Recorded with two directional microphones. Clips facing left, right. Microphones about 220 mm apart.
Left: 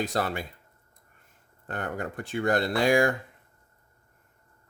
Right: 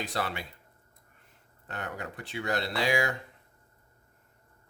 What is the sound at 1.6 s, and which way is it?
Speech, 50° left (ahead or behind).